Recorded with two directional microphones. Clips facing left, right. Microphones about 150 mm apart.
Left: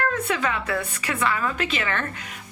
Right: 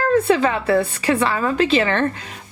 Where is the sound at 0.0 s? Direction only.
35° right (ahead or behind).